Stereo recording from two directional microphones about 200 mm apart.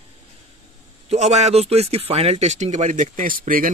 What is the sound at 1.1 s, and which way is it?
Speech, 35° right (ahead or behind).